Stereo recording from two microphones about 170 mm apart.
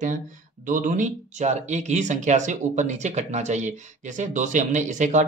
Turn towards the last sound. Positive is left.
turn(degrees=-45)  # may be behind; listen again after turning